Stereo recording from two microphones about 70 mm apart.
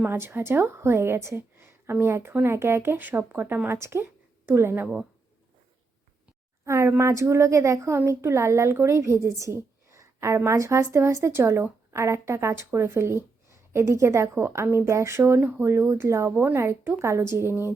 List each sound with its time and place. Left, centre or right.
0.1 s a woman's voice: right
6.7 s a woman's voice: right